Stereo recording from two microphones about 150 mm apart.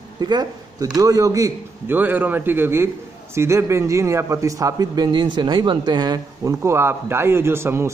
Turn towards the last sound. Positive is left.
turn(degrees=-15)  # may be behind; listen again after turning